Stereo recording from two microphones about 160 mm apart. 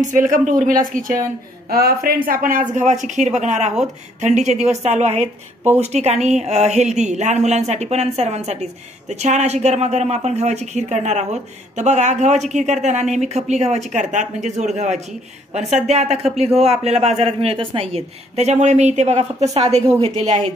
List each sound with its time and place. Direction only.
0.1 s speech: 55° right (ahead or behind)
1.7 s a woman's voice: 70° right (ahead or behind)
2.7 s a man's voice: 50° right (ahead or behind)